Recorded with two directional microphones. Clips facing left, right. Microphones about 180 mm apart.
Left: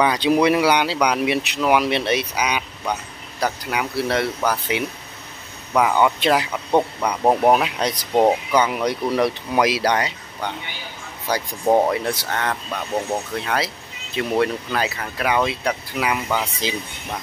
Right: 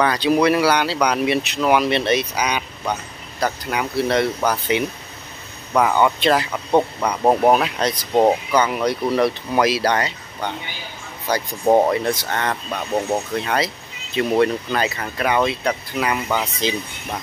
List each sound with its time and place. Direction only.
0.0 s speech: 15° left (ahead or behind)
6.5 s speech: centre (ahead or behind)
8.1 s speech: centre (ahead or behind)
8.5 s speech: 10° left (ahead or behind)
11.6 s speech: 5° right (ahead or behind)
11.9 s speech: 5° left (ahead or behind)
14.1 s speech: centre (ahead or behind)